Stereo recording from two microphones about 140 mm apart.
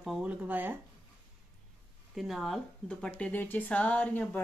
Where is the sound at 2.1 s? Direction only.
Centre (ahead or behind).